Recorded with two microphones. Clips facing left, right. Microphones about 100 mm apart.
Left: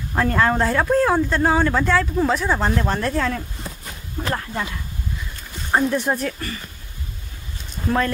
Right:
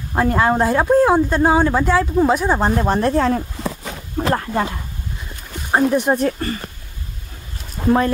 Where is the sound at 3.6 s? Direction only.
90° right.